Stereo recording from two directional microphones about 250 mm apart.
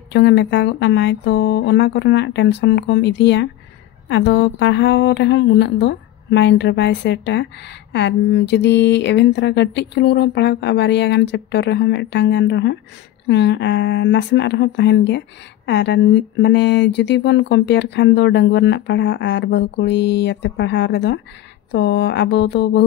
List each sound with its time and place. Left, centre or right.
0.1 s speech: left